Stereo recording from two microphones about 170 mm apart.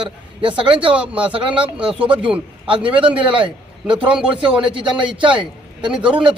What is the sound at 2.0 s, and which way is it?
Speech, 10° right (ahead or behind).